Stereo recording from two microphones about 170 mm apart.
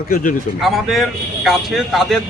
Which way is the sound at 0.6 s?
Centre (ahead or behind).